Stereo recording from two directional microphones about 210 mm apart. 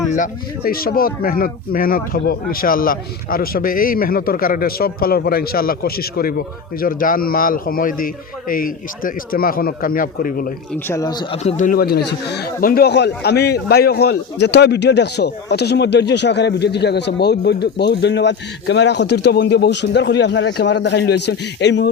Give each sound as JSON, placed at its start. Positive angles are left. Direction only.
{"t": 0.1, "sound": "speech", "side_deg": 40}
{"t": 10.8, "sound": "speech", "side_deg": 15}